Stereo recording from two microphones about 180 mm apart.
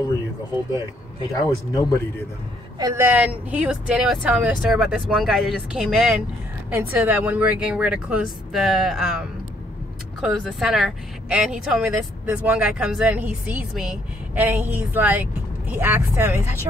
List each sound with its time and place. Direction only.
1.7 s speech: 20° left (ahead or behind)
2.8 s speech: 15° right (ahead or behind)
10.2 s speech: 5° right (ahead or behind)